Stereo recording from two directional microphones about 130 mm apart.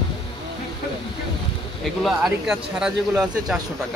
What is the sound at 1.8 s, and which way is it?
Speech, centre (ahead or behind).